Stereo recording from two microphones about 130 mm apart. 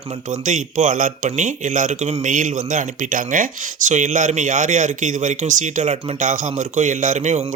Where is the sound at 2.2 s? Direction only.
85° right.